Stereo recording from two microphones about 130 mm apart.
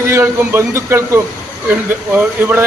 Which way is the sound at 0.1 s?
20° right (ahead or behind).